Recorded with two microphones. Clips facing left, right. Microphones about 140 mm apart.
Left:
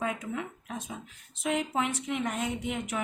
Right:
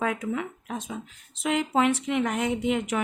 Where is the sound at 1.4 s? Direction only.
90° right.